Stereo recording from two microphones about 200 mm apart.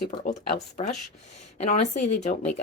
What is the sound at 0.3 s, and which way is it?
Speech, 35° left (ahead or behind).